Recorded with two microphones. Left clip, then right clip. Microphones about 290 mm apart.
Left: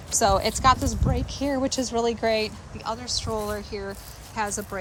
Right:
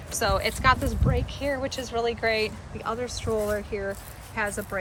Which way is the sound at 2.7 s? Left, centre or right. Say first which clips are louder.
Left 3 dB; centre.